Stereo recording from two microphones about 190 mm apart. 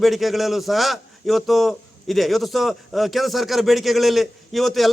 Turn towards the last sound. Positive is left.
turn(degrees=0)  # may be behind; listen again after turning